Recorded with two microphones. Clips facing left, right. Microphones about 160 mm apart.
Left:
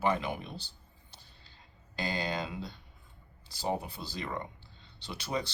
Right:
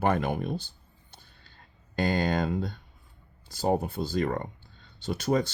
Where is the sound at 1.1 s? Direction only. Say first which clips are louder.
Right 3 dB; 55° right (ahead or behind).